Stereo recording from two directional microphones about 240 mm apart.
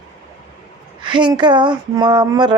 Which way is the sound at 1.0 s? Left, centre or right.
Centre.